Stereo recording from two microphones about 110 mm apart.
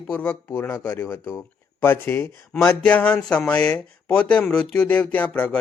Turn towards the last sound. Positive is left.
turn(degrees=15)  # may be behind; listen again after turning